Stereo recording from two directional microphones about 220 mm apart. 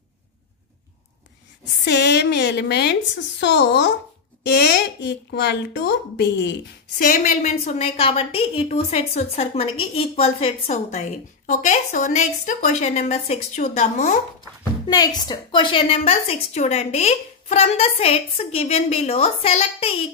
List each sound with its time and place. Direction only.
1.6 s a woman's voice: 50° left (ahead or behind)
7.0 s a woman's voice: 35° left (ahead or behind)
14.9 s a woman's voice: 20° left (ahead or behind)